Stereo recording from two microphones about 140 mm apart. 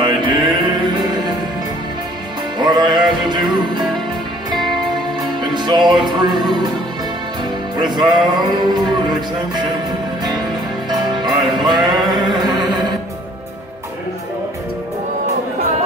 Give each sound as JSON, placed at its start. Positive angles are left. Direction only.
{"t": 0.0, "sound": "music", "side_deg": -35}
{"t": 2.6, "sound": "music", "side_deg": -35}
{"t": 7.8, "sound": "speech", "side_deg": -30}
{"t": 10.9, "sound": "music", "side_deg": -30}